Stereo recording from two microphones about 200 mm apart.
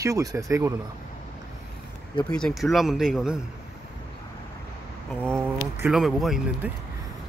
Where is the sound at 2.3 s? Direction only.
5° left (ahead or behind).